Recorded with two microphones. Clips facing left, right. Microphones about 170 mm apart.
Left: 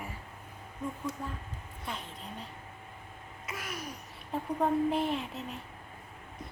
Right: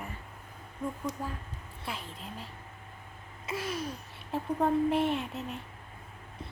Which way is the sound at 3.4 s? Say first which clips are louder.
Right 6 dB; 30° right (ahead or behind).